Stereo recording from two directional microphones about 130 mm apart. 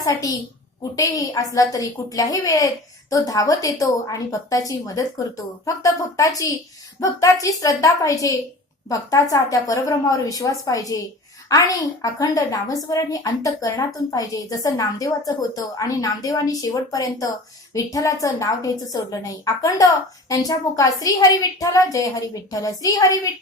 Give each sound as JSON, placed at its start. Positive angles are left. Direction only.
{"t": 0.0, "sound": "a woman's voice", "side_deg": 25}